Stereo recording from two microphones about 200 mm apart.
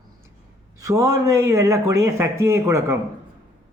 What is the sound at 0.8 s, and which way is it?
A man's voice, 15° right (ahead or behind).